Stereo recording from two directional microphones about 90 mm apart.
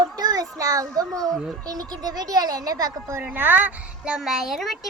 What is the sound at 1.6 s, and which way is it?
Speech, 45° right (ahead or behind).